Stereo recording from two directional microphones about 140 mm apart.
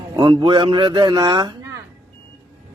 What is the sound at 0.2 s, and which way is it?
A man's voice, 30° right (ahead or behind).